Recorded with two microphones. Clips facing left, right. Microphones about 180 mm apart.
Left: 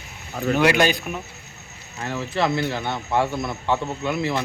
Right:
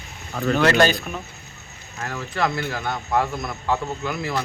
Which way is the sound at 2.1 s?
25° left (ahead or behind).